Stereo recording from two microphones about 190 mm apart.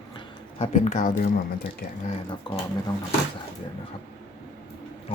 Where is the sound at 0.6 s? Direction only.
35° left (ahead or behind).